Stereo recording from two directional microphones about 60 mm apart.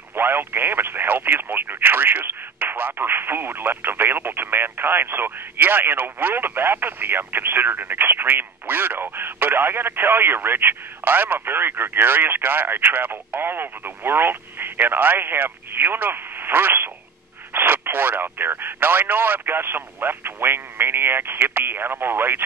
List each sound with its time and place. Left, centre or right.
0.1 s speech: right